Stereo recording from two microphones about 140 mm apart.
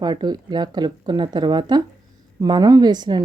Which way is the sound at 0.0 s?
30° right (ahead or behind).